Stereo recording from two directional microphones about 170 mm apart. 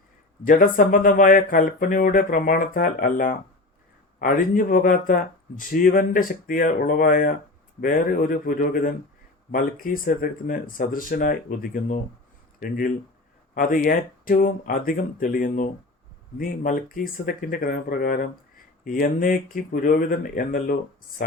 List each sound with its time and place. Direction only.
0.4 s speech: 50° left (ahead or behind)